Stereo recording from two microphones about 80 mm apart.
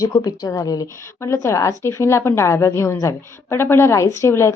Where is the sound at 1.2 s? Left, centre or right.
Left.